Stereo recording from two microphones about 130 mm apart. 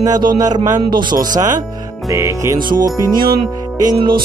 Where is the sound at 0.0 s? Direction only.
30° right (ahead or behind).